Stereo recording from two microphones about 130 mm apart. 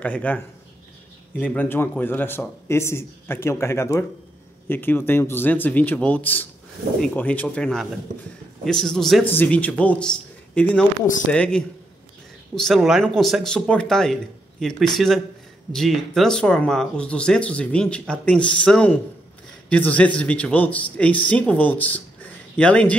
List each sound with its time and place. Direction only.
0.0 s speech: 10° left (ahead or behind)
1.4 s speech: 15° left (ahead or behind)
9.2 s speech: 15° left (ahead or behind)